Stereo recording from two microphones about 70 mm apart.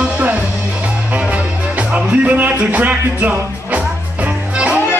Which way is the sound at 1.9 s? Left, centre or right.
Right.